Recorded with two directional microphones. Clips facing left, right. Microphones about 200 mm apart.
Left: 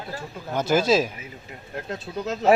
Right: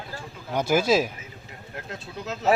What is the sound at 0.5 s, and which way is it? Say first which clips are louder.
Speech: left 1 dB; 10° right (ahead or behind).